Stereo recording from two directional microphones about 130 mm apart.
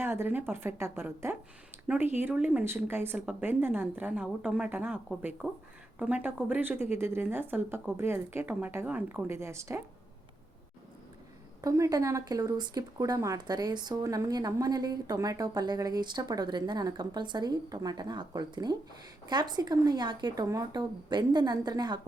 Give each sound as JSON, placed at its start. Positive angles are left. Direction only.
{"t": 0.0, "sound": "speech", "side_deg": -20}
{"t": 11.6, "sound": "speech", "side_deg": -30}